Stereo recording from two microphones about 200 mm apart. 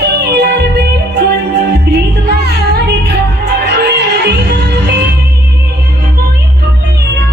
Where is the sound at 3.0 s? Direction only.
55° right (ahead or behind).